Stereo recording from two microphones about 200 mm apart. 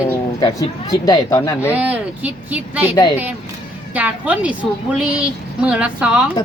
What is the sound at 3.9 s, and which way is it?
A woman's voice, 10° right (ahead or behind).